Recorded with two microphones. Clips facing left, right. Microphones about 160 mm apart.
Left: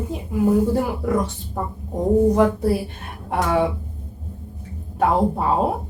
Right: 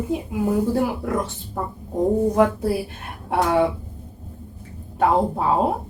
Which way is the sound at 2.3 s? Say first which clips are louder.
Left 1 dB; centre (ahead or behind).